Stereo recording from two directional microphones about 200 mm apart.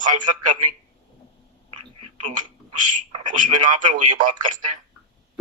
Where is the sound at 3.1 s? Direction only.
35° right (ahead or behind).